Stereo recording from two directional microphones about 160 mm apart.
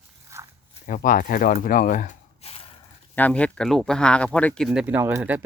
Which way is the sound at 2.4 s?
35° left (ahead or behind).